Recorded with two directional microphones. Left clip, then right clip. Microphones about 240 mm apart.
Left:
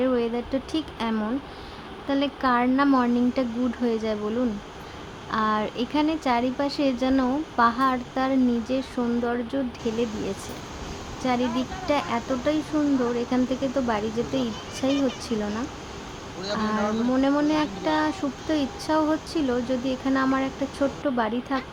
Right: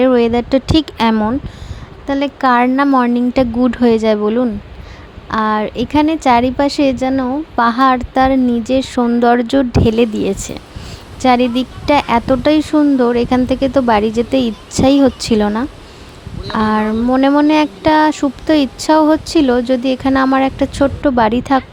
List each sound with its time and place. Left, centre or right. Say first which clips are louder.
0.0 s speech: right 13 dB; right